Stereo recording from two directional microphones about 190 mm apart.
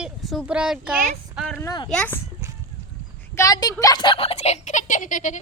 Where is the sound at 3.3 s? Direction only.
20° left (ahead or behind); by 5.4 s 40° left (ahead or behind).